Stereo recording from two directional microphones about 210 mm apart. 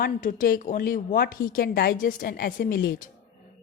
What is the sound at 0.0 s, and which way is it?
A woman's voice, 40° left (ahead or behind).